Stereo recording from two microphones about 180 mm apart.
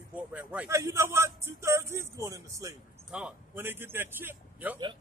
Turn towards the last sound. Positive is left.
turn(degrees=-10)  # may be behind; listen again after turning